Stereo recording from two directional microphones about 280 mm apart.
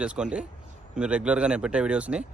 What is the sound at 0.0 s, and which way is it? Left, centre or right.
Speech, centre.